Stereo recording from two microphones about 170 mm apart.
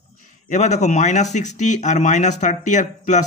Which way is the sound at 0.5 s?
45° left (ahead or behind).